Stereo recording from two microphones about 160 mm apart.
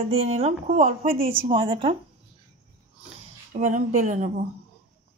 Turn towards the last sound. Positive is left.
turn(degrees=-50)  # may be behind; listen again after turning